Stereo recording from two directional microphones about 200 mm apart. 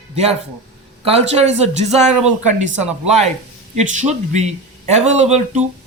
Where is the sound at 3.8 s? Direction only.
35° right (ahead or behind).